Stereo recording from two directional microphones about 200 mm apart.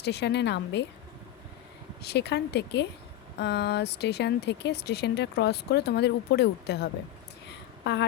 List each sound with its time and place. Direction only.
0.0 s speech: 55° left (ahead or behind)
2.0 s speech: 55° left (ahead or behind)